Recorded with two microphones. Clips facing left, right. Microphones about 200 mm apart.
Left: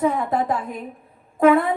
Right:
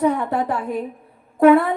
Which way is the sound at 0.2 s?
70° right (ahead or behind).